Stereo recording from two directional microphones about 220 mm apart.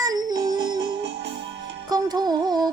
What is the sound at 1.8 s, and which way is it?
Music, 15° right (ahead or behind).